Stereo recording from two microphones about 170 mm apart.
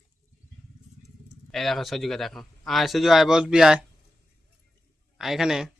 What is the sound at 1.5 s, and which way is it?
Speech, centre (ahead or behind).